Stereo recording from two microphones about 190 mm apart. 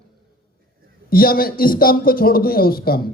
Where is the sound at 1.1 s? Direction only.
50° left (ahead or behind).